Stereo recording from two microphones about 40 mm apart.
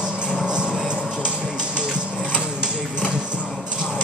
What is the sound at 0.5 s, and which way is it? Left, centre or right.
Vehicle, right.